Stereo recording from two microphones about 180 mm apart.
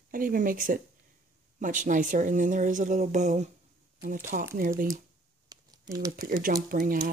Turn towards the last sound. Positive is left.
turn(degrees=-50)  # may be behind; listen again after turning